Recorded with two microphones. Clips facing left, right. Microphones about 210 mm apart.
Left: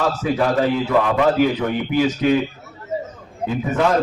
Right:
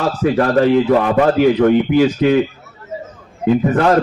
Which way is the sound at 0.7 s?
50° right (ahead or behind).